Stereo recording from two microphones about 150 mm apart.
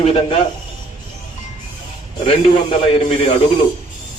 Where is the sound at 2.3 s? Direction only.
35° left (ahead or behind).